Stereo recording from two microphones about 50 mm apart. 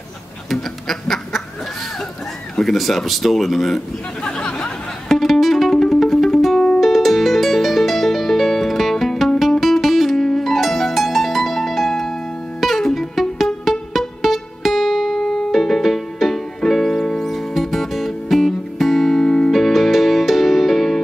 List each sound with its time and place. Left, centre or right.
0.5 s quack: centre
2.5 s speech: centre
4.2 s a sound: centre
5.0 s music: centre